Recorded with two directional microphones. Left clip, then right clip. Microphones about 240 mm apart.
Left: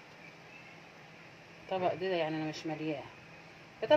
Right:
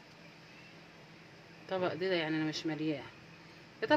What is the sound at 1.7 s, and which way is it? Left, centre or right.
Speech, right.